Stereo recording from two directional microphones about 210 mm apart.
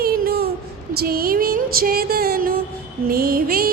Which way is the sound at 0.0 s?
45° right (ahead or behind).